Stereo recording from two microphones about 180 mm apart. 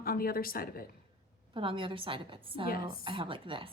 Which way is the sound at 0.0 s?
55° left (ahead or behind).